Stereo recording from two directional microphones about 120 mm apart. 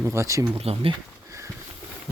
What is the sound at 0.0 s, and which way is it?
Speech, 25° right (ahead or behind).